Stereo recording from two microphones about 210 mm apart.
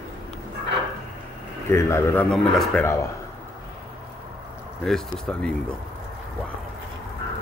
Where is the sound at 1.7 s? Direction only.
10° left (ahead or behind).